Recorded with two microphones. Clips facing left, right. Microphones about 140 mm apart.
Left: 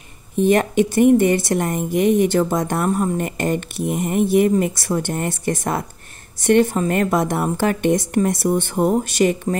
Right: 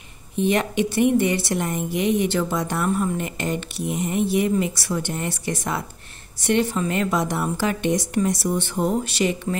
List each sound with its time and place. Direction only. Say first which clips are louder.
0.4 s a woman's voice: left 5 dB; 45° left (ahead or behind)